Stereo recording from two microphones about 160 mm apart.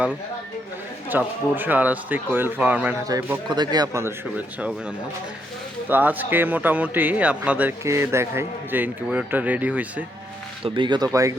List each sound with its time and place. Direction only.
1.1 s speech: 10° right (ahead or behind)
5.9 s speech: 10° right (ahead or behind)
10.6 s speech: 30° right (ahead or behind)